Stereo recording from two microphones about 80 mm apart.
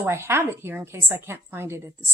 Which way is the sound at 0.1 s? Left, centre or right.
Right.